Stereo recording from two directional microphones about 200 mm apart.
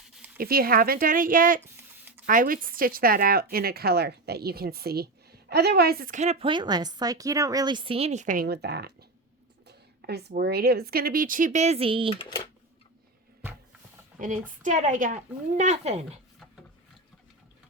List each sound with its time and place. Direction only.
0.3 s a woman's voice: 45° right (ahead or behind)
1.6 s a sound: 10° right (ahead or behind)
2.2 s a woman's voice: 45° right (ahead or behind); by 12.1 s 25° right (ahead or behind)
12.1 s speech: 25° left (ahead or behind)
14.5 s speech: 40° right (ahead or behind)